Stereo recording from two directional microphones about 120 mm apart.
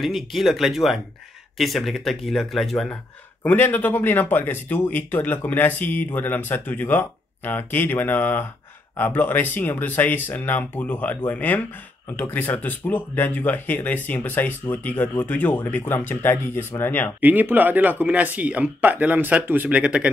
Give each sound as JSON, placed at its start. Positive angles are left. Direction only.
{"t": 0.0, "sound": "speech", "side_deg": 0}
{"t": 3.4, "sound": "speech", "side_deg": 15}
{"t": 17.2, "sound": "speech", "side_deg": -15}